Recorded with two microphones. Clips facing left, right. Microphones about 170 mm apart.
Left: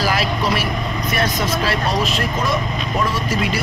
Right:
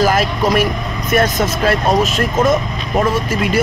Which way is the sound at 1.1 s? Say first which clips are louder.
Right 7 dB; 50° right (ahead or behind).